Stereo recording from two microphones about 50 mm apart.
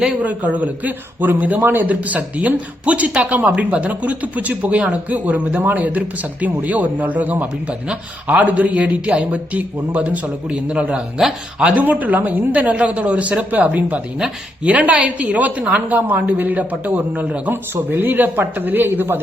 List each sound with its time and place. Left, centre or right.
0.2 s a man's voice: right